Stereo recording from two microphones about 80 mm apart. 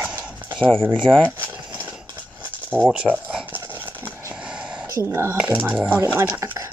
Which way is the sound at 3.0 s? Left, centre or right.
Right.